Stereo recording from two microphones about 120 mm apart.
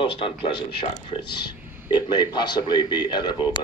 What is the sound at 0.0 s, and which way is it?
A man's voice, 45° left (ahead or behind).